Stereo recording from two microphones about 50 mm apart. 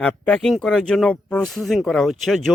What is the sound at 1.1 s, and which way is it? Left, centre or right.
Speech, left.